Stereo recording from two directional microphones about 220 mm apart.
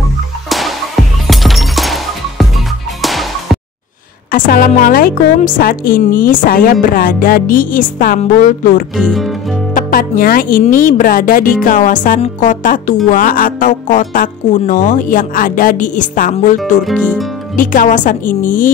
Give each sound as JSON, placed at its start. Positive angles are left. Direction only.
{"t": 0.5, "sound": "music", "side_deg": 0}
{"t": 4.3, "sound": "speech", "side_deg": 40}
{"t": 8.9, "sound": "speech", "side_deg": 0}
{"t": 9.8, "sound": "speech", "side_deg": 40}
{"t": 16.8, "sound": "speech", "side_deg": 0}
{"t": 17.6, "sound": "speech", "side_deg": 35}